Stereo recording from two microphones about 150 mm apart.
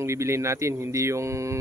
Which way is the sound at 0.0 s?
20° right (ahead or behind).